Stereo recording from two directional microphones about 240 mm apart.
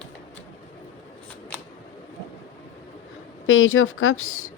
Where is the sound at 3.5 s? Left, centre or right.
Left.